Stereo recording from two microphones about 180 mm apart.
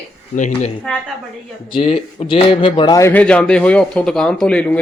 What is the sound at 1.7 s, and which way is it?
Speech, 30° left (ahead or behind).